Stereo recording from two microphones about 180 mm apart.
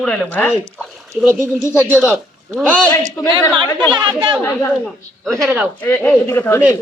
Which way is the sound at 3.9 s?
25° right (ahead or behind).